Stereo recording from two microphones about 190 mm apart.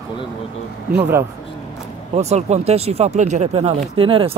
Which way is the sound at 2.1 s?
35° right (ahead or behind).